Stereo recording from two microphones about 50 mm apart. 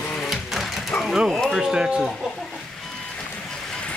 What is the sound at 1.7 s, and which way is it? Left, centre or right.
Speech, centre.